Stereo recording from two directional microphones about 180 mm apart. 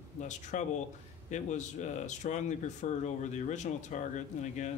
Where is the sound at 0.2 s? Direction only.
40° left (ahead or behind).